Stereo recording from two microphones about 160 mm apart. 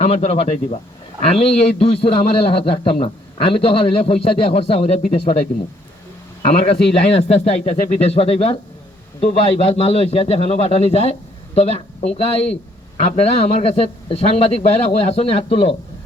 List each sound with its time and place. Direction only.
0.0 s a man's voice: 40° left (ahead or behind)
7.2 s a man's voice: 40° left (ahead or behind)